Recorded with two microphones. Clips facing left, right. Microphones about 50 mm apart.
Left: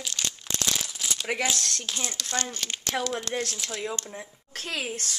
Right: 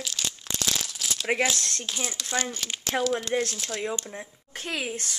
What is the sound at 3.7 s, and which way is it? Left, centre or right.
Speech, centre.